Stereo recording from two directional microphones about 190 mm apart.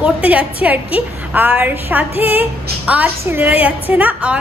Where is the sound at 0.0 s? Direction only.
5° right (ahead or behind).